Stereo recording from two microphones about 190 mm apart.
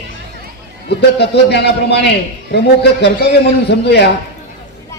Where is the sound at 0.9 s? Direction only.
65° left (ahead or behind).